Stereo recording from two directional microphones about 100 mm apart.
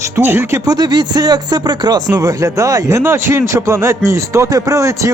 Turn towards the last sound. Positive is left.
turn(degrees=-30)  # may be behind; listen again after turning